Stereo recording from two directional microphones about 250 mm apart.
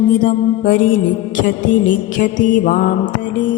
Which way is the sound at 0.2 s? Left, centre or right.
Left.